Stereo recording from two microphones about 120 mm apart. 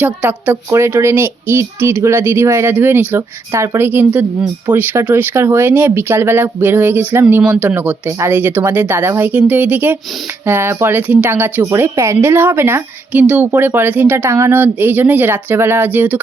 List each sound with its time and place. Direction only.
0.0 s a child's voice: 10° right (ahead or behind)